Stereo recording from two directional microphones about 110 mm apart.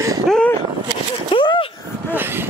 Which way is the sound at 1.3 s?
50° left (ahead or behind).